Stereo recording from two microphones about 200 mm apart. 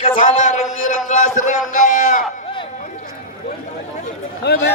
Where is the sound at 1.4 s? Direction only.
40° left (ahead or behind).